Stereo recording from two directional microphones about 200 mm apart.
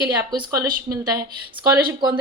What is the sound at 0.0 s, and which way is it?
Speech, 20° right (ahead or behind).